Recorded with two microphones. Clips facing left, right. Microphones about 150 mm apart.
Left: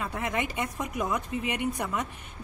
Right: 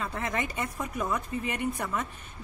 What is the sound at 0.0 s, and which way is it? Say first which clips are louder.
Speech: left 1 dB; 10° left (ahead or behind).